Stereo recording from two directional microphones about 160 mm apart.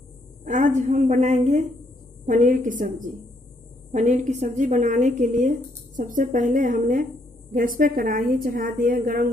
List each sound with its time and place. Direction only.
0.5 s a woman's voice: 50° right (ahead or behind)